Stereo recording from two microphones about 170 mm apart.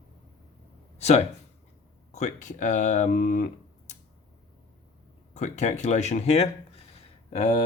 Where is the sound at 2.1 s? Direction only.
45° left (ahead or behind).